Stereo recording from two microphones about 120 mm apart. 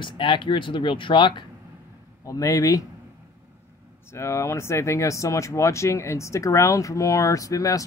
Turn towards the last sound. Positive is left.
turn(degrees=30)  # may be behind; listen again after turning